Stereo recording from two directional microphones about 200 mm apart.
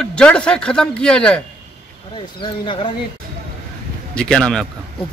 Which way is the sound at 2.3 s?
25° left (ahead or behind).